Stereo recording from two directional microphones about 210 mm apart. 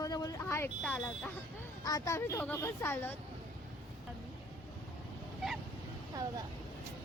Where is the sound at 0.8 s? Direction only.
Centre (ahead or behind).